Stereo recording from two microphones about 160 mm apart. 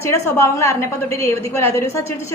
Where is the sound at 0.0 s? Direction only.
15° left (ahead or behind).